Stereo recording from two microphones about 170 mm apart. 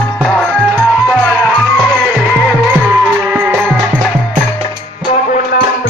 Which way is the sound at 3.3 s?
10° right (ahead or behind).